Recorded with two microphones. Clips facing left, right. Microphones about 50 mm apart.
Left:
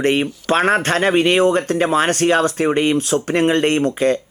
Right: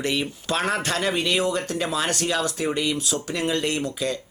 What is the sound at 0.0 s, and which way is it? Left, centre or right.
Speech, left.